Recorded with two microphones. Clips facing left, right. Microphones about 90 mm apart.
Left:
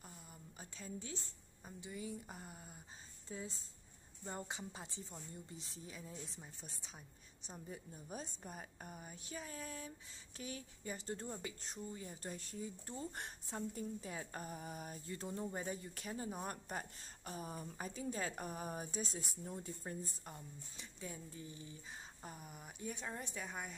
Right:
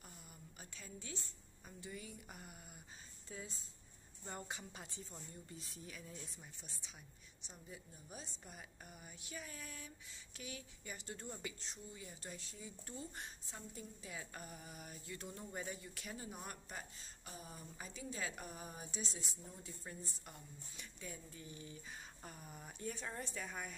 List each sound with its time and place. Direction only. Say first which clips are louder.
0.6 s a sound: left 6 dB; 30° left (ahead or behind)
1.8 s speech: left 5 dB; 20° left (ahead or behind)
6.6 s a woman's voice: left 3 dB; 40° left (ahead or behind)
11.6 s a woman's voice: left 5 dB; 45° left (ahead or behind); by 23.8 s 20° left (ahead or behind)